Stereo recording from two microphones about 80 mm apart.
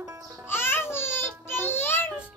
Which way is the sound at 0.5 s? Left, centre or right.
Left.